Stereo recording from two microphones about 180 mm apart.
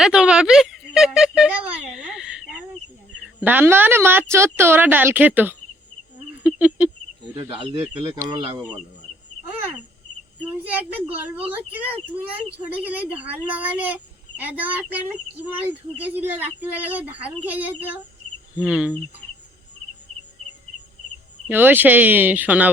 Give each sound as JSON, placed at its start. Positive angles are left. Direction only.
{"t": 0.0, "sound": "speech", "side_deg": -5}
{"t": 3.4, "sound": "a child's voice", "side_deg": -10}
{"t": 7.3, "sound": "speech", "side_deg": -20}
{"t": 10.4, "sound": "a child's voice", "side_deg": -10}
{"t": 21.5, "sound": "a child's voice", "side_deg": -10}